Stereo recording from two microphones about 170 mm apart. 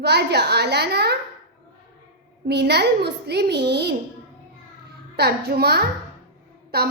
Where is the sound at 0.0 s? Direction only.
80° right.